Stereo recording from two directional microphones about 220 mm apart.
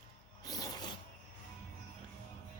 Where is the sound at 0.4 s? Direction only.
15° left (ahead or behind).